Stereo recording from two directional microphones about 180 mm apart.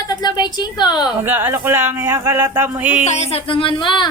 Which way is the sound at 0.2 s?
25° left (ahead or behind).